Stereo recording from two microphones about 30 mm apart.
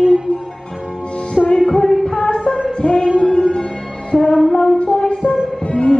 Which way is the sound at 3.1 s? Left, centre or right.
Left.